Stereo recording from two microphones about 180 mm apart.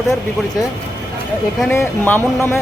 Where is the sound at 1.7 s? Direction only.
10° left (ahead or behind).